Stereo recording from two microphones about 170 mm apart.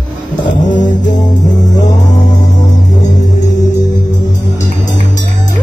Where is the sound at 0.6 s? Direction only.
45° left (ahead or behind).